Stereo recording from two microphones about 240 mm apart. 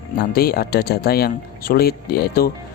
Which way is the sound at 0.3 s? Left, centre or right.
Left.